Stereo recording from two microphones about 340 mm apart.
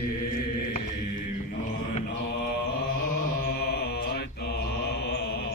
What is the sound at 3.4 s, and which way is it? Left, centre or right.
Mantra, left.